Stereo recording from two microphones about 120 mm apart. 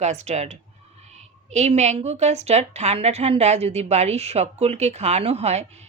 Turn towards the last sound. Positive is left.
turn(degrees=-65)  # may be behind; listen again after turning